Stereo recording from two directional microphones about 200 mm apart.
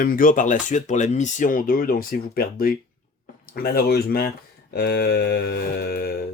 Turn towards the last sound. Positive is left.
turn(degrees=50)  # may be behind; listen again after turning